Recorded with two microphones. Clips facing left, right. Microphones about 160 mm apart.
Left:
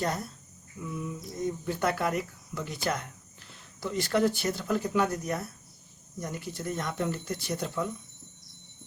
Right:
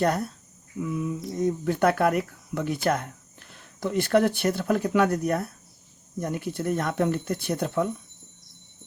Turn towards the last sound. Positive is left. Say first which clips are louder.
# right 6 dB
turn(degrees=-55)  # may be behind; listen again after turning